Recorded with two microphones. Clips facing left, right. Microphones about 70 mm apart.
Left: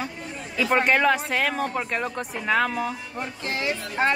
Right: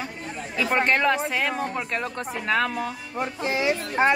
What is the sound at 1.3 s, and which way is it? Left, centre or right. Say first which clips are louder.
Speech: left 1 dB; centre.